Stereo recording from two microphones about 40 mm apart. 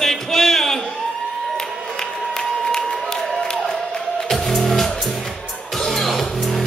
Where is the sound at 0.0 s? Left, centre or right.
Centre.